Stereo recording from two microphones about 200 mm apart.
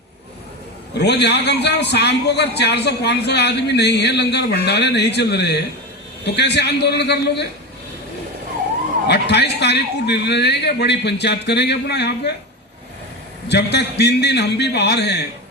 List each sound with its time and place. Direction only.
0.9 s a man's voice: 55° left (ahead or behind)
9.0 s a man's voice: 55° left (ahead or behind)
13.5 s a man's voice: 55° left (ahead or behind)